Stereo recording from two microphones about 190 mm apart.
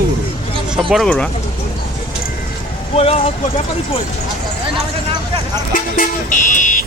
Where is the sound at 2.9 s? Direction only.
30° left (ahead or behind).